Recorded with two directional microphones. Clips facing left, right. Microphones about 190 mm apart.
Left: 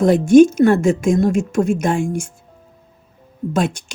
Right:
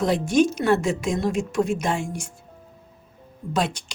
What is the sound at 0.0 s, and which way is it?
Speech, 50° left (ahead or behind).